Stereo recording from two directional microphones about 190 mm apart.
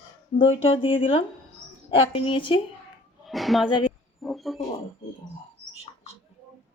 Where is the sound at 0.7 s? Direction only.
30° left (ahead or behind).